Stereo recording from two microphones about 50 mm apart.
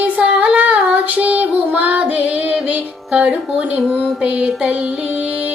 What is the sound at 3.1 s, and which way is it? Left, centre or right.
Carnatic music, centre.